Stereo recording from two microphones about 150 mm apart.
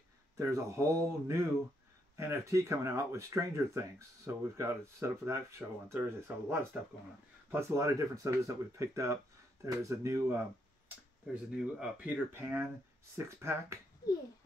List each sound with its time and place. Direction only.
0.4 s speech: 20° right (ahead or behind)
11.5 s speech: 5° right (ahead or behind)